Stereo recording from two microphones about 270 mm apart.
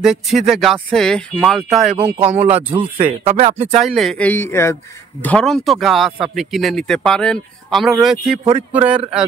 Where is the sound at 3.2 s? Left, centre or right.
Right.